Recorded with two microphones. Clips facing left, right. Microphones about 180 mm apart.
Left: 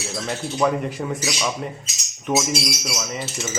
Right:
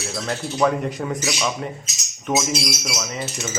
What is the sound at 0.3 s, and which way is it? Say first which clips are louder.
Speech: right 1 dB; centre (ahead or behind).